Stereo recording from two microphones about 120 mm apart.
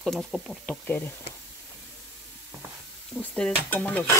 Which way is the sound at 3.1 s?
10° left (ahead or behind).